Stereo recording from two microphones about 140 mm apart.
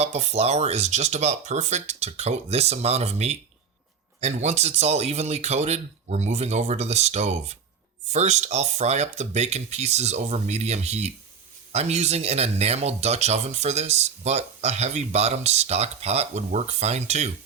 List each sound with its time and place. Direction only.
0.0 s speech: 50° right (ahead or behind)